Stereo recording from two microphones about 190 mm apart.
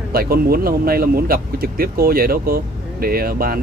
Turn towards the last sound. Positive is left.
turn(degrees=-50)  # may be behind; listen again after turning